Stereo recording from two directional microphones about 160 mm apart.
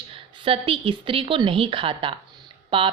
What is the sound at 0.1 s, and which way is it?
Speech, 35° right (ahead or behind).